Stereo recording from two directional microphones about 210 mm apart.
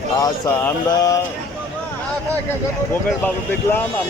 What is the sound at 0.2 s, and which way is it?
Speech, 15° left (ahead or behind).